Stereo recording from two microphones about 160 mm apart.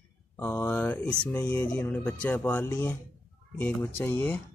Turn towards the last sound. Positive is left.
turn(degrees=10)  # may be behind; listen again after turning